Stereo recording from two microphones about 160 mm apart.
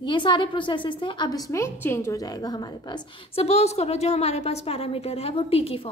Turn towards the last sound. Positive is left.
turn(degrees=40)  # may be behind; listen again after turning